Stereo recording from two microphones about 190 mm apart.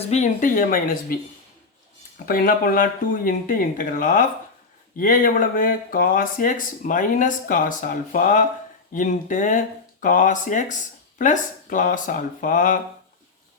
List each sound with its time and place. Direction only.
0.0 s speech: 35° left (ahead or behind)